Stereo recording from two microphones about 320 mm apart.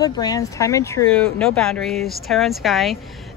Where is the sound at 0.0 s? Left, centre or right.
Centre.